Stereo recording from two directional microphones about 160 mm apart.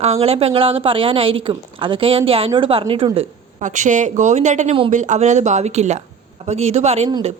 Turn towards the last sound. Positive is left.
turn(degrees=-40)  # may be behind; listen again after turning